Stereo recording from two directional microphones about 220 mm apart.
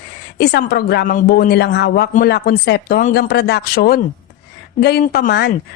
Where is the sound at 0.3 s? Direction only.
45° left (ahead or behind).